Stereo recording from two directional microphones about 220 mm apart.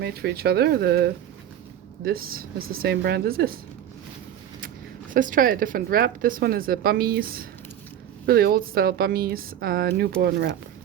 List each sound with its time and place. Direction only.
0.0 s a woman's voice: 45° right (ahead or behind)
5.1 s a woman's voice: 40° right (ahead or behind)